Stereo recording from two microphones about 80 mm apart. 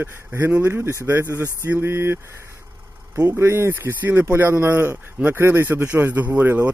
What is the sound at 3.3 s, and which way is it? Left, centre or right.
Speech, right.